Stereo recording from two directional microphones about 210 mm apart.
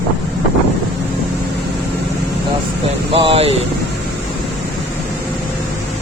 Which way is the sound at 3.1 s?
25° right (ahead or behind).